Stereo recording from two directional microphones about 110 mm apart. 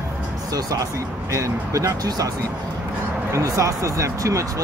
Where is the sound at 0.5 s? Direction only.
35° right (ahead or behind).